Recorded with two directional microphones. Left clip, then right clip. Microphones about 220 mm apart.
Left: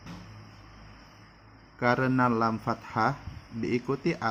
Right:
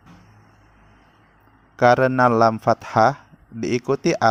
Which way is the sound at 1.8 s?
45° right (ahead or behind).